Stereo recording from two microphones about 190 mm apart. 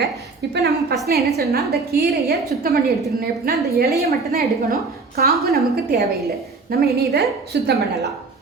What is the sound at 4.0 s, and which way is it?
A woman's voice, 55° right (ahead or behind).